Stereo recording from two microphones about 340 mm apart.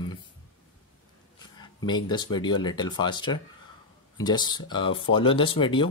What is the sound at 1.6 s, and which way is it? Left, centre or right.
Speech, centre.